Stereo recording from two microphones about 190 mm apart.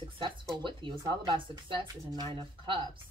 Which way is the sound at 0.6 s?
25° right (ahead or behind).